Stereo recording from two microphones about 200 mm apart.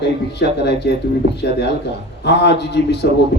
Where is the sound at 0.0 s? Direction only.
55° left (ahead or behind).